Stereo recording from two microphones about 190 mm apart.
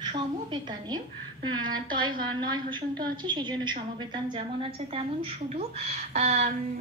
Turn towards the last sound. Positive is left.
turn(degrees=-35)  # may be behind; listen again after turning